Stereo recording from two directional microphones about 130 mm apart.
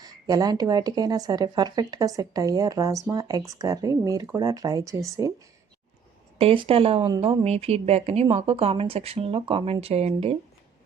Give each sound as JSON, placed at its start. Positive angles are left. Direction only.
{"t": 0.0, "sound": "speech", "side_deg": -30}
{"t": 6.4, "sound": "a woman's voice", "side_deg": -45}